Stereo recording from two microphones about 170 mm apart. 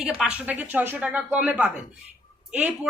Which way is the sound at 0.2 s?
5° right (ahead or behind).